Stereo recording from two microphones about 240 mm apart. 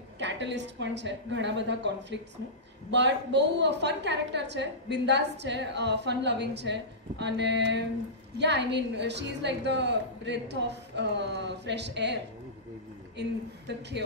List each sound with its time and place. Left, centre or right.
0.2 s a woman's voice: right
13.7 s a woman's voice: right